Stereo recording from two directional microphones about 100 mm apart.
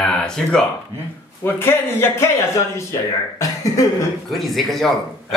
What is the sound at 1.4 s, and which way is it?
Speech, 25° left (ahead or behind).